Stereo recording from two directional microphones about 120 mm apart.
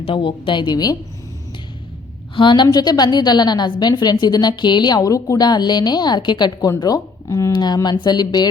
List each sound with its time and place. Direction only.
0.0 s a woman's voice: 45° left (ahead or behind)
2.3 s a woman's voice: 40° left (ahead or behind)